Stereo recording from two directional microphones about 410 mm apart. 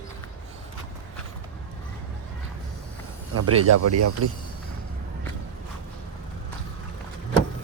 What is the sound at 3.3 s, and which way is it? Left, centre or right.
Speech, right.